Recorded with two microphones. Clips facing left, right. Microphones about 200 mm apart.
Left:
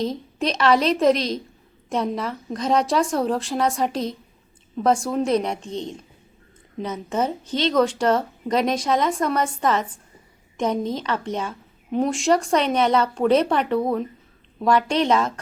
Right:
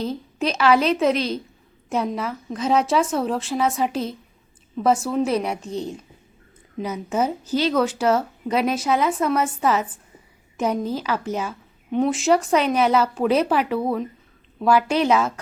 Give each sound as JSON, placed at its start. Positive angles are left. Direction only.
{"t": 0.3, "sound": "a woman's voice", "side_deg": -5}